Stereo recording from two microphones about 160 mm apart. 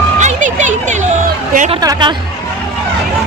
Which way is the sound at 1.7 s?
25° right (ahead or behind).